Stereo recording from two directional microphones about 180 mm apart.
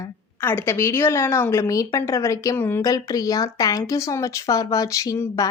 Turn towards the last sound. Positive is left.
turn(degrees=20)  # may be behind; listen again after turning